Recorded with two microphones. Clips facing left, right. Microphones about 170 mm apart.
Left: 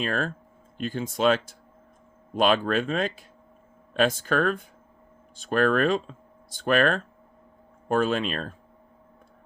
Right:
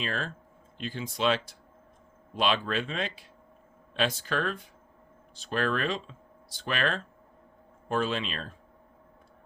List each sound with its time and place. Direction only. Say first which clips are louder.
0.0 s speech: left 6 dB; 45° left (ahead or behind)